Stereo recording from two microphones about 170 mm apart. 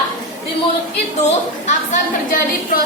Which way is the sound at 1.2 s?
45° left (ahead or behind).